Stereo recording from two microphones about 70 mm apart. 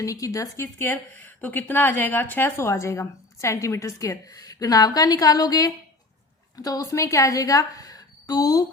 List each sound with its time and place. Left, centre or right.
0.0 s a woman's voice: left
0.6 s a woman's voice: left
2.6 s a woman's voice: left